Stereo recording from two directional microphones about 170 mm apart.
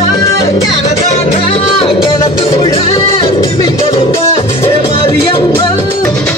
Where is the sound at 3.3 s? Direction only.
20° left (ahead or behind).